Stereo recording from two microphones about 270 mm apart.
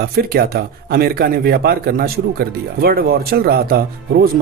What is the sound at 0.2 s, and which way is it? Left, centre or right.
A man's voice, right.